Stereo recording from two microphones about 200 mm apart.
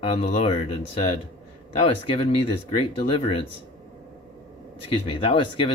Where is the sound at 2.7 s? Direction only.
25° left (ahead or behind).